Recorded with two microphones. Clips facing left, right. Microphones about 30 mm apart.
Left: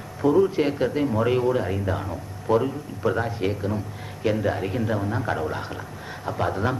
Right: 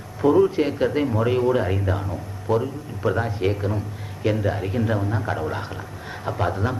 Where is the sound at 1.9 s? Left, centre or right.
Centre.